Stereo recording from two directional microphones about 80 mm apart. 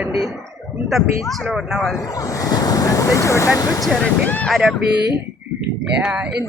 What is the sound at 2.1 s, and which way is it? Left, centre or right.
Speech, left.